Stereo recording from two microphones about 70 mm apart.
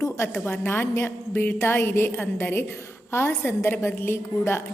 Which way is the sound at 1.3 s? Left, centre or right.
Left.